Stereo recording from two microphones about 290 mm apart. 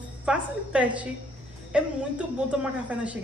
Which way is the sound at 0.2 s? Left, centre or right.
Centre.